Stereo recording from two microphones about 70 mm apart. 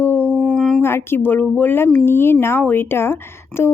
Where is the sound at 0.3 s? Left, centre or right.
Centre.